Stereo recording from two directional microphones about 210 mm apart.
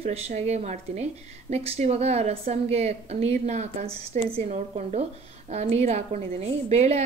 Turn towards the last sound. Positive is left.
turn(degrees=-30)  # may be behind; listen again after turning